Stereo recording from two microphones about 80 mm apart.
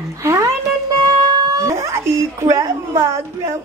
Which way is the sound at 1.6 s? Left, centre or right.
Right.